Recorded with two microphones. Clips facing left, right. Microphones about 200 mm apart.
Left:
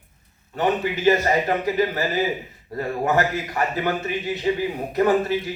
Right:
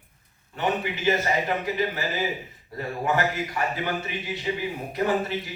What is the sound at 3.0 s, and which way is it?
Speech, 45° left (ahead or behind).